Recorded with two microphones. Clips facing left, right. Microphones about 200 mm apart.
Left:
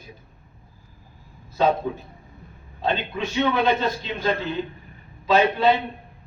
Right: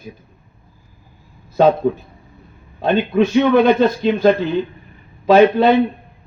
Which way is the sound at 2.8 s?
55° right (ahead or behind).